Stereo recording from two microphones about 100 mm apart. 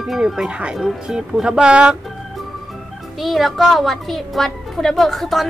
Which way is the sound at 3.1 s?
Centre (ahead or behind).